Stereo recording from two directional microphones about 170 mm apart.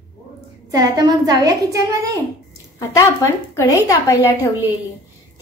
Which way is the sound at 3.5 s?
20° left (ahead or behind).